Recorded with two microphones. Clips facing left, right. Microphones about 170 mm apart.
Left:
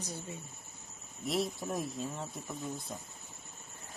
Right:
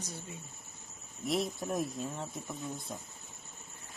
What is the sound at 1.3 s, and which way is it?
Speech, centre (ahead or behind).